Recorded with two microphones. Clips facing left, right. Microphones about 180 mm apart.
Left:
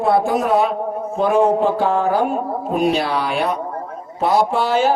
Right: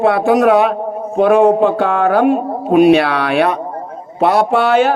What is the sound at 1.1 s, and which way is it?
A man's voice, 65° right (ahead or behind).